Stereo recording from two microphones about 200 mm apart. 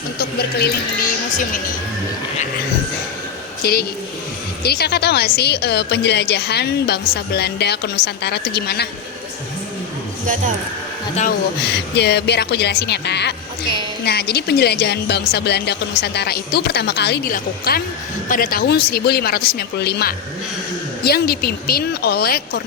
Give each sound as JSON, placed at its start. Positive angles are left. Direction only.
{"t": 0.2, "sound": "a woman's voice", "side_deg": 50}
{"t": 3.6, "sound": "a woman's voice", "side_deg": 50}
{"t": 11.6, "sound": "a woman's voice", "side_deg": 55}